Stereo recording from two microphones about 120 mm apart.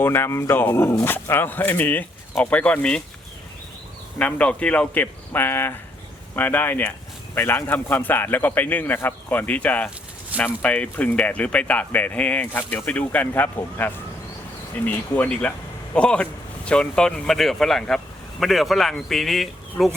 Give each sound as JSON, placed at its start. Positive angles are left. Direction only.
{"t": 0.0, "sound": "speech", "side_deg": 20}
{"t": 4.2, "sound": "speech", "side_deg": 10}